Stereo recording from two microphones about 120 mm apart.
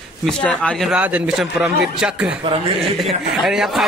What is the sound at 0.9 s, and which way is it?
Speech, 10° right (ahead or behind).